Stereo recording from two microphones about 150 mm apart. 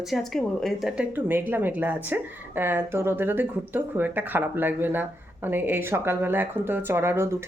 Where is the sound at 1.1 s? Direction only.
15° right (ahead or behind).